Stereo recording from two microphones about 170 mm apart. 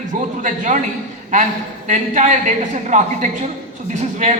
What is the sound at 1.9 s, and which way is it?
A man's voice, 45° right (ahead or behind).